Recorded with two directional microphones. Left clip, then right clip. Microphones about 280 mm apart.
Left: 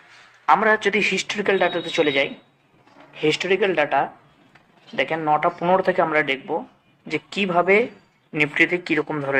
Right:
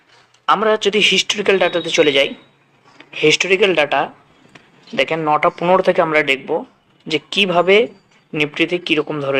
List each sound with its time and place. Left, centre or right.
0.4 s a man's voice: centre